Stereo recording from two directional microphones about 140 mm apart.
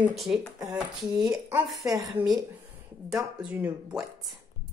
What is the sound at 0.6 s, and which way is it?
Speech, 25° right (ahead or behind).